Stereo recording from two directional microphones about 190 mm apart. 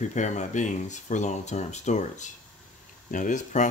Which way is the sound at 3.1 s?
40° left (ahead or behind).